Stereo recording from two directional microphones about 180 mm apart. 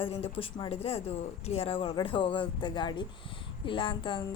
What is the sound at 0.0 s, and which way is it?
Speech, 30° left (ahead or behind).